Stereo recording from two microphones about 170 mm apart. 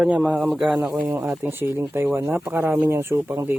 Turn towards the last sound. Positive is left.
turn(degrees=-15)  # may be behind; listen again after turning